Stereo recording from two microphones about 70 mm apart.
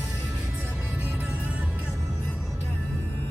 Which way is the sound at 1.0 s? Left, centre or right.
Right.